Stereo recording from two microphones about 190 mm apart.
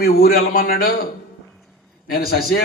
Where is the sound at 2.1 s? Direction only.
55° left (ahead or behind).